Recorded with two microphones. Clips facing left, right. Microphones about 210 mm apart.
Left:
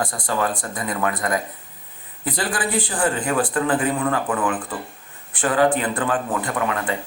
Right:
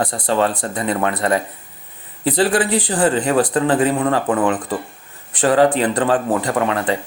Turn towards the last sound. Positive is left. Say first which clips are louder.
# right 5 dB
turn(degrees=-35)  # may be behind; listen again after turning